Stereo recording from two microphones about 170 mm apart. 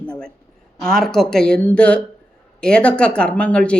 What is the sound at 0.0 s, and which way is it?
Speech, 5° left (ahead or behind).